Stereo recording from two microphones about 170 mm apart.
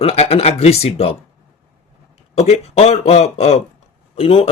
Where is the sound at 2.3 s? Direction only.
40° left (ahead or behind).